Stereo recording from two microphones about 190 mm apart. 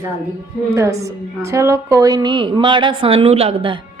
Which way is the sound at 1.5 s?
15° right (ahead or behind).